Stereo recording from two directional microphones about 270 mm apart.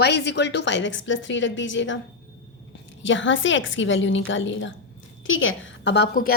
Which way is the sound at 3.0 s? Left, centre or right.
Left.